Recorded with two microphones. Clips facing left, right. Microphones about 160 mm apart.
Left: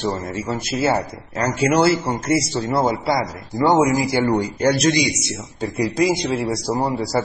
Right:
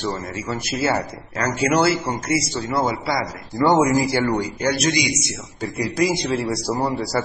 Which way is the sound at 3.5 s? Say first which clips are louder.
Even; 15° left (ahead or behind).